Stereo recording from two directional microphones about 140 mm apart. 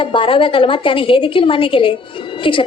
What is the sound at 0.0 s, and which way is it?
A woman's voice, 40° left (ahead or behind).